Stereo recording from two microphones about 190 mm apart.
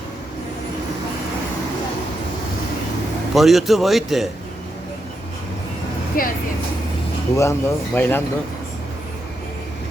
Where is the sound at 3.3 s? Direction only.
Centre (ahead or behind).